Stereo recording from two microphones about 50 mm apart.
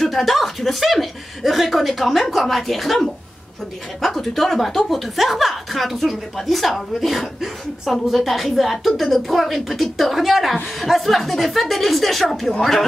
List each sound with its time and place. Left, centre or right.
0.0 s a woman's voice: centre